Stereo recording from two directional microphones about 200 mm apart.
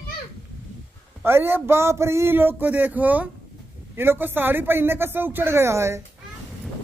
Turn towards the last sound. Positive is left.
turn(degrees=-15)  # may be behind; listen again after turning